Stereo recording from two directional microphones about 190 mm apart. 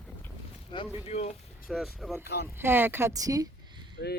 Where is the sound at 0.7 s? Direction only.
25° left (ahead or behind).